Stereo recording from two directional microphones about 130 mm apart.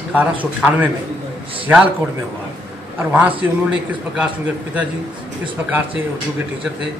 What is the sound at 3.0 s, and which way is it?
Speech, 10° right (ahead or behind).